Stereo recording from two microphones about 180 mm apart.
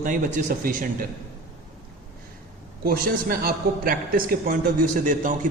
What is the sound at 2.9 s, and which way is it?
A man's voice, 55° right (ahead or behind).